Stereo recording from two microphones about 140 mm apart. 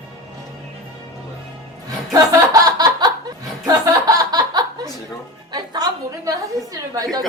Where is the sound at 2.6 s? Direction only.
30° right (ahead or behind).